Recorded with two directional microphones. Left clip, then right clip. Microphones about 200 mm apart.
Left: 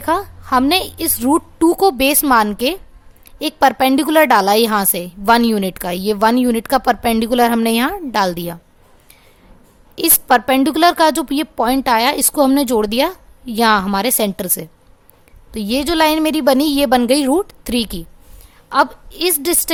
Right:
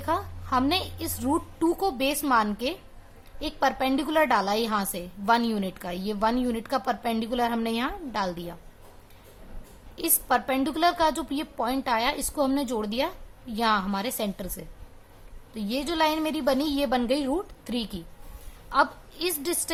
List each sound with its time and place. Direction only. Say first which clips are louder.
0.0 s a woman's voice: left 10 dB; 45° left (ahead or behind)
9.9 s a woman's voice: left 12 dB; 50° left (ahead or behind)